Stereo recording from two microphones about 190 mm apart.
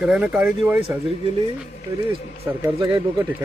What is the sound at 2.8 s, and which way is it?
Speech, 20° right (ahead or behind).